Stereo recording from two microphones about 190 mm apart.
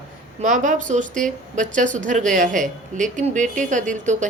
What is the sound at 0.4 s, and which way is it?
A woman's voice, 40° right (ahead or behind).